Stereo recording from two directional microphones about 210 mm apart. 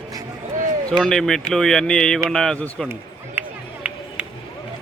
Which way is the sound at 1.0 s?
Centre (ahead or behind).